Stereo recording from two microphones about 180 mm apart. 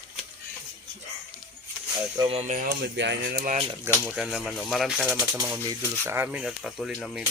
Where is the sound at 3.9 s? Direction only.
5° right (ahead or behind).